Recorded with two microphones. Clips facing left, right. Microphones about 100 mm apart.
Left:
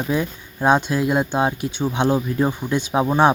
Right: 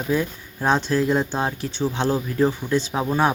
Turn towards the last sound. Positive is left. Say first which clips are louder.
# left 5 dB
turn(degrees=25)  # may be behind; listen again after turning